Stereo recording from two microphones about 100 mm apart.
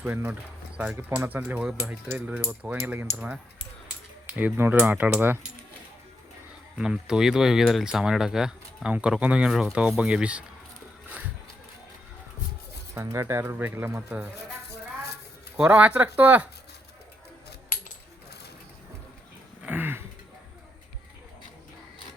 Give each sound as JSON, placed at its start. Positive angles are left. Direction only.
{"t": 0.0, "sound": "speech", "side_deg": -15}
{"t": 4.4, "sound": "speech", "side_deg": -20}
{"t": 6.7, "sound": "speech", "side_deg": -5}
{"t": 12.9, "sound": "speech", "side_deg": -30}
{"t": 15.5, "sound": "speech", "side_deg": -15}
{"t": 19.6, "sound": "a sound", "side_deg": -20}